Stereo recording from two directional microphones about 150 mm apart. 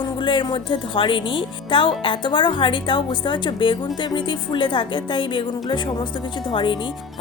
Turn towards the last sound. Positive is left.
turn(degrees=30)  # may be behind; listen again after turning